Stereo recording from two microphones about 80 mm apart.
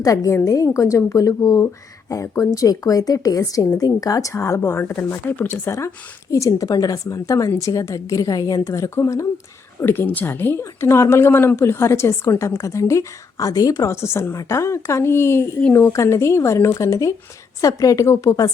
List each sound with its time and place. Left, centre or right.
0.0 s a woman's voice: left
9.8 s a woman's voice: left